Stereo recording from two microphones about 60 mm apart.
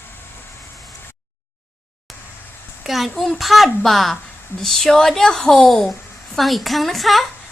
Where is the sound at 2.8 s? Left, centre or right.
Centre.